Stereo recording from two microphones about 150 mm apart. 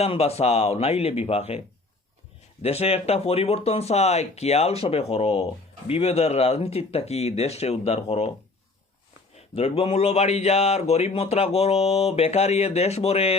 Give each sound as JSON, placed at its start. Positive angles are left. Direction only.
{"t": 0.0, "sound": "speech", "side_deg": 45}
{"t": 9.6, "sound": "speech", "side_deg": 40}